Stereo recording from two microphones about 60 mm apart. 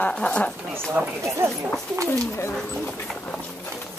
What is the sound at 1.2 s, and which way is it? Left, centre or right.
Speech, right.